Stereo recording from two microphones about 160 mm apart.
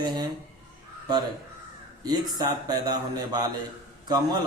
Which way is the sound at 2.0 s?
25° right (ahead or behind).